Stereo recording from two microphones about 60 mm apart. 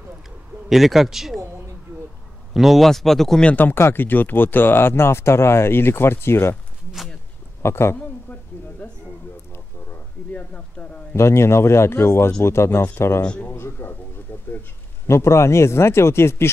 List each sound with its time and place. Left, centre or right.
0.7 s speech: centre
2.5 s speech: centre
3.5 s speech: left
7.6 s speech: left
10.3 s a sound: centre
11.1 s speech: left
13.6 s a sound: left
15.0 s speech: left